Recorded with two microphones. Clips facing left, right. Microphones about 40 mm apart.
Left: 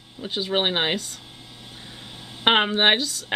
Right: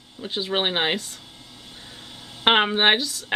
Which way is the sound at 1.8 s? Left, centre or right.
Centre.